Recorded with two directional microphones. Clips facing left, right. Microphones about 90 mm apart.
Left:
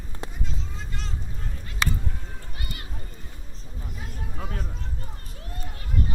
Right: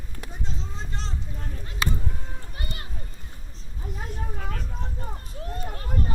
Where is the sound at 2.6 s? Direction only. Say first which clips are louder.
Right 2 dB; 30° right (ahead or behind).